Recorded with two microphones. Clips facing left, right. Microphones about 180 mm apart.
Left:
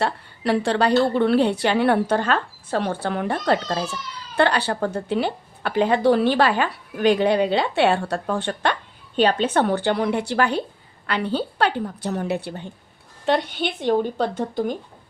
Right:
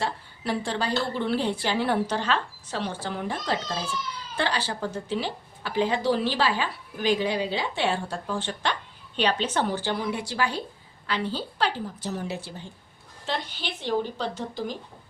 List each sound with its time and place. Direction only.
0.0 s a woman's voice: 75° left (ahead or behind)
9.1 s a woman's voice: 50° left (ahead or behind)